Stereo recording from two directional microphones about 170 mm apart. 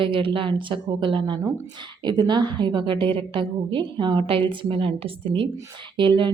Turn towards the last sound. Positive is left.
turn(degrees=-30)  # may be behind; listen again after turning